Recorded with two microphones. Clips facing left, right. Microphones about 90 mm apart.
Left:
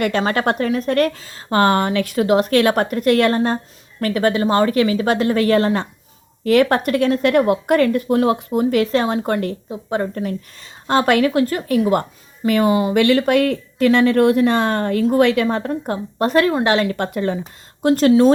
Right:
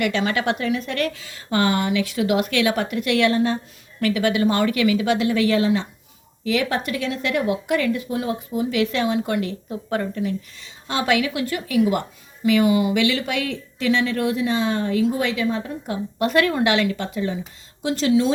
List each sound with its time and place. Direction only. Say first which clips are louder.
0.0 s a woman's voice: left 4 dB; 45° left (ahead or behind); by 8.8 s 60° left (ahead or behind)
8.8 s a woman's voice: left 3 dB; 40° left (ahead or behind)
9.6 s speech: left 3 dB; 25° left (ahead or behind)
10.2 s a woman's voice: left 1 dB; 45° left (ahead or behind)
13.0 s speech: left 8 dB; 50° left (ahead or behind)
16.1 s a woman's voice: left 3 dB; 35° left (ahead or behind)
17.0 s a woman's voice: left 5 dB; 55° left (ahead or behind)